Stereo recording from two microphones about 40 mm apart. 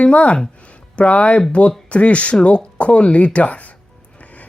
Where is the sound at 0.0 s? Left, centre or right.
Left.